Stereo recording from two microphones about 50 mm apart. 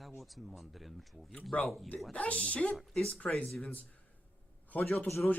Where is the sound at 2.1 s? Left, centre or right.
Left.